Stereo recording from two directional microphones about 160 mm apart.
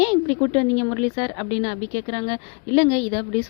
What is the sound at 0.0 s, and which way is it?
A woman's voice, 35° left (ahead or behind).